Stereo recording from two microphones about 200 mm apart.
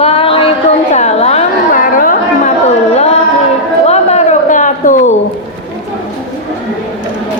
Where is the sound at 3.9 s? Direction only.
35° left (ahead or behind).